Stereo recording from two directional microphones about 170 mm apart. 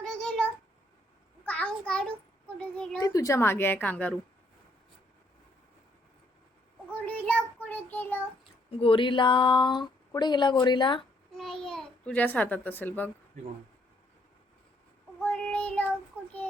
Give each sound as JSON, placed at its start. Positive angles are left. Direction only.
{"t": 0.0, "sound": "a sound", "side_deg": 5}
{"t": 1.5, "sound": "a sound", "side_deg": 5}
{"t": 2.7, "sound": "speech", "side_deg": 5}
{"t": 3.0, "sound": "a woman's voice", "side_deg": 20}
{"t": 6.9, "sound": "child singing", "side_deg": 10}
{"t": 8.8, "sound": "speech", "side_deg": 30}
{"t": 11.3, "sound": "babbling", "side_deg": 0}
{"t": 15.2, "sound": "child singing", "side_deg": 10}